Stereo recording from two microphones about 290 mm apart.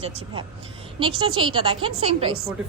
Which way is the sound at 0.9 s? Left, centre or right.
Centre.